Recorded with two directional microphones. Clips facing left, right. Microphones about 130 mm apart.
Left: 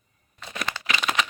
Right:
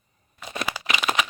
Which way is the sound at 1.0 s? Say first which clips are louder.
Right 1 dB; 10° right (ahead or behind).